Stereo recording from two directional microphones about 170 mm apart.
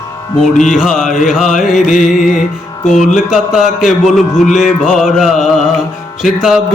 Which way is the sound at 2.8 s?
45° left (ahead or behind).